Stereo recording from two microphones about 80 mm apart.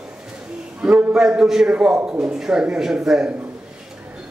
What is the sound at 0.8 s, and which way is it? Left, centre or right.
A man's voice, centre.